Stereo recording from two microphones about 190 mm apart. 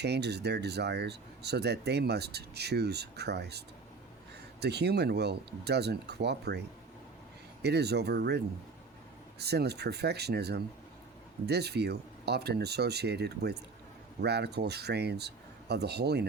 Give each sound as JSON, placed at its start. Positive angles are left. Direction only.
{"t": 0.0, "sound": "speech", "side_deg": -60}
{"t": 4.6, "sound": "speech", "side_deg": -60}
{"t": 9.4, "sound": "speech", "side_deg": -60}